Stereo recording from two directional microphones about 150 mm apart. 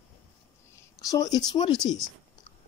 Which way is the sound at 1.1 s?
25° left (ahead or behind).